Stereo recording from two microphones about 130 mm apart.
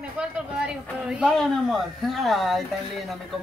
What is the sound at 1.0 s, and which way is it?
Speech, 5° right (ahead or behind).